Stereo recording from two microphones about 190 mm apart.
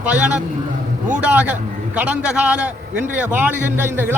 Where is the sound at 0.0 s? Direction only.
5° right (ahead or behind).